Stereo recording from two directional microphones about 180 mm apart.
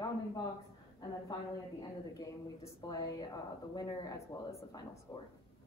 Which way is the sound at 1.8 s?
20° left (ahead or behind).